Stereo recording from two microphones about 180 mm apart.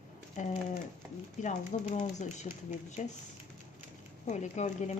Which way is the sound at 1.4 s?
45° left (ahead or behind).